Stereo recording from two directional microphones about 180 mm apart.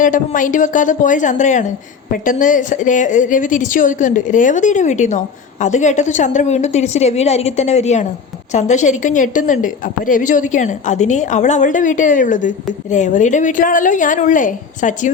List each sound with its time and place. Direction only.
0.0 s a woman's voice: 45° left (ahead or behind)